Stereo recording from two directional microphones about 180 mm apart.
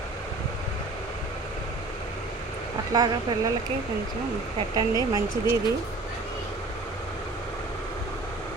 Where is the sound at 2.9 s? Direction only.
20° right (ahead or behind).